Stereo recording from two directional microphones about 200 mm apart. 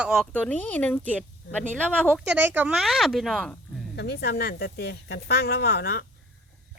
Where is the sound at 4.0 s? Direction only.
55° left (ahead or behind).